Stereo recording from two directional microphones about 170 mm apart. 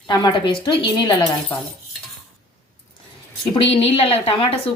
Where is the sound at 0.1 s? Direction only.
25° left (ahead or behind).